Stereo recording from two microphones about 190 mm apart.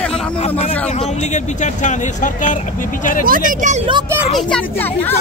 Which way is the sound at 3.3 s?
45° right (ahead or behind).